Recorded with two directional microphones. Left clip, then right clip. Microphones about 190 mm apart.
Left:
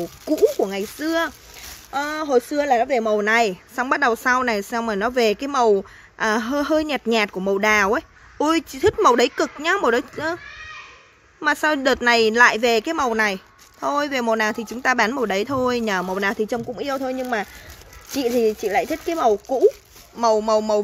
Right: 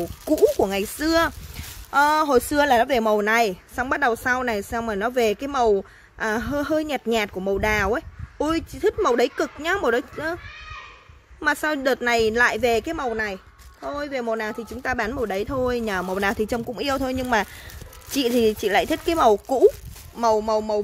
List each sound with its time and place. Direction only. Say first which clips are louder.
0.2 s speech: even; 5° right (ahead or behind)
3.2 s a woman's voice: left 2 dB; 5° right (ahead or behind)
11.4 s a woman's voice: left 3 dB; 5° left (ahead or behind); by 19.6 s 25° right (ahead or behind)
20.2 s a woman's voice: left 2 dB; centre (ahead or behind)
20.4 s a woman's voice: left 4 dB; 10° left (ahead or behind)